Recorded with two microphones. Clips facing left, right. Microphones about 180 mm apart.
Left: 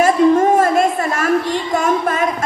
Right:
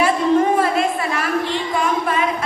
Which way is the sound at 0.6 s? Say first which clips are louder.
Left 4 dB; 45° left (ahead or behind).